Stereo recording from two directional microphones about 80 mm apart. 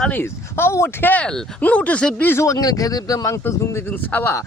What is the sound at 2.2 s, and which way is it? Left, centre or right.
Speech, left.